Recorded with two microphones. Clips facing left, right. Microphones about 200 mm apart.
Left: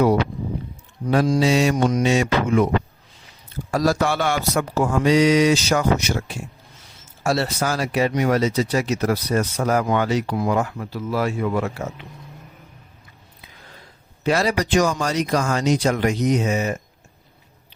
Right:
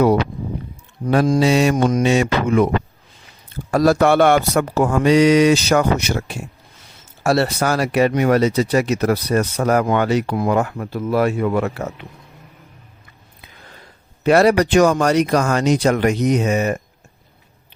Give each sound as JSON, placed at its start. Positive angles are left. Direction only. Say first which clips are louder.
{"t": 1.0, "sound": "speech", "louder": "right 3 dB", "side_deg": -50}
{"t": 3.7, "sound": "speech", "louder": "right 6 dB", "side_deg": -60}
{"t": 14.3, "sound": "speech", "louder": "right 7 dB", "side_deg": -60}